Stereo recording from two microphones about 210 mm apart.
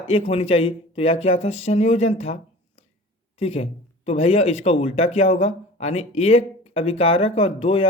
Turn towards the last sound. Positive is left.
turn(degrees=25)  # may be behind; listen again after turning